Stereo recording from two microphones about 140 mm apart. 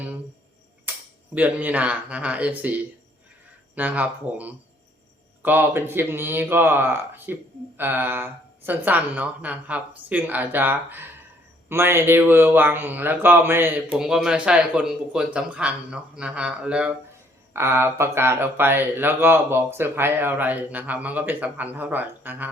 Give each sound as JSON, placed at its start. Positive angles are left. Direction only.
{"t": 1.4, "sound": "speech", "side_deg": -10}
{"t": 14.0, "sound": "speech", "side_deg": -5}